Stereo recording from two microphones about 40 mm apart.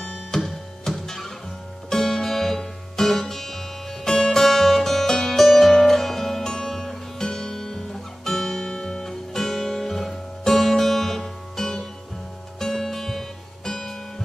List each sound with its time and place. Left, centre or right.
0.1 s music: centre